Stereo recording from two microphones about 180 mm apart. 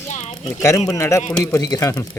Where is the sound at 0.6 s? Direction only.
20° left (ahead or behind).